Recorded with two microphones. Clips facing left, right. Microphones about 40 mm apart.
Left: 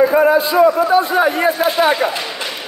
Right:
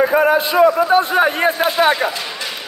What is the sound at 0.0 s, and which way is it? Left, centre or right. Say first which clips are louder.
A man's voice: left 2 dB; right.